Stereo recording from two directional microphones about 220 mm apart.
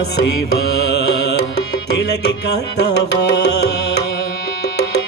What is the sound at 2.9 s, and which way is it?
Music, 50° left (ahead or behind).